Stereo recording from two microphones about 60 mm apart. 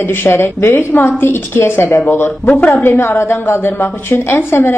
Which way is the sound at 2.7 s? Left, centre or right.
Left.